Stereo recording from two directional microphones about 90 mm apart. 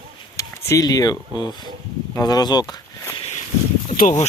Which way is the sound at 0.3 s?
40° left (ahead or behind).